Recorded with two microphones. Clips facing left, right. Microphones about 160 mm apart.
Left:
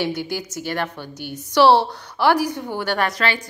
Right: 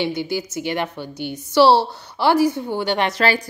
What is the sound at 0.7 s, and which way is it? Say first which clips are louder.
Speech: even; 15° right (ahead or behind).